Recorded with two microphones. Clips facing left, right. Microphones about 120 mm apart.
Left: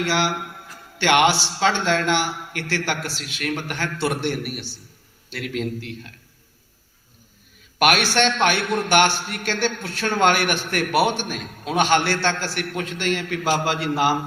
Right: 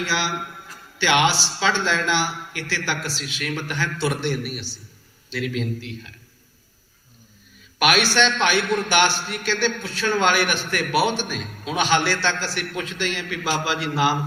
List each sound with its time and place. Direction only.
0.0 s a man's voice: 55° left (ahead or behind)
7.8 s a man's voice: 50° left (ahead or behind)